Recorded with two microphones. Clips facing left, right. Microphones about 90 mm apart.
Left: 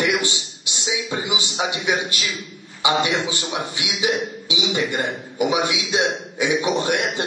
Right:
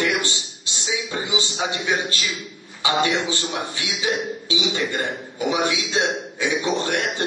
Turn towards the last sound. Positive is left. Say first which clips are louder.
# left 2 dB
turn(degrees=15)  # may be behind; listen again after turning